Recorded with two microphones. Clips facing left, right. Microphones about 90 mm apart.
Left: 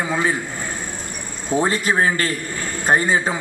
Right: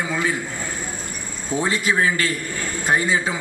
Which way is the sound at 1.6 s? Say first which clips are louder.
Left 2 dB; 40° left (ahead or behind).